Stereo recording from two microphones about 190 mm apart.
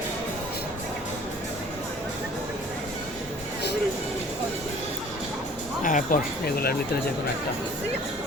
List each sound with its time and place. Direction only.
5.8 s speech: 45° left (ahead or behind)